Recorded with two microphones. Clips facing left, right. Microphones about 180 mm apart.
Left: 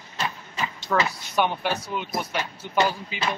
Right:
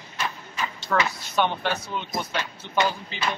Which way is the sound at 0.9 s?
5° left (ahead or behind).